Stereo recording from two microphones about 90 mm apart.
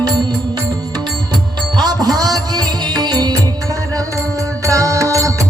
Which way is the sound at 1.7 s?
50° right (ahead or behind).